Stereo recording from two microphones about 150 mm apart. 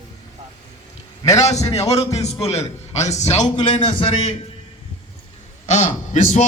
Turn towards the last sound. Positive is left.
turn(degrees=55)  # may be behind; listen again after turning